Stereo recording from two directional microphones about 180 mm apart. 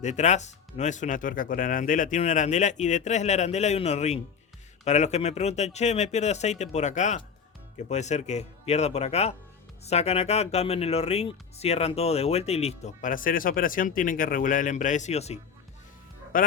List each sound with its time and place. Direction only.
0.0 s speech: 40° left (ahead or behind)
16.3 s speech: 50° left (ahead or behind)